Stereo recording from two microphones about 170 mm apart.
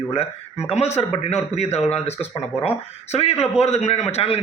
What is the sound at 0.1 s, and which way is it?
A man's voice, 35° left (ahead or behind).